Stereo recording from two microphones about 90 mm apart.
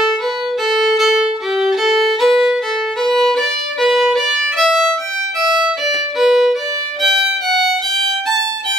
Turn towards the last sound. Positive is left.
turn(degrees=0)  # may be behind; listen again after turning